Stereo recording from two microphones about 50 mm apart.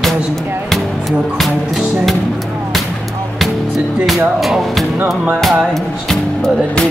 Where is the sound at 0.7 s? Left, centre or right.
Centre.